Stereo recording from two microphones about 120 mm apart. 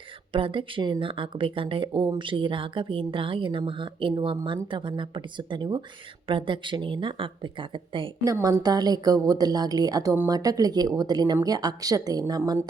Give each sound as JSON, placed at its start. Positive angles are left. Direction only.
{"t": 0.3, "sound": "a woman's voice", "side_deg": -45}
{"t": 8.2, "sound": "a woman's voice", "side_deg": -30}